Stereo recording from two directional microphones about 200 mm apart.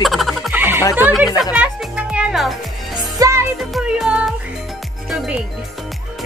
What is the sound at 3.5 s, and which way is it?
Music, centre (ahead or behind).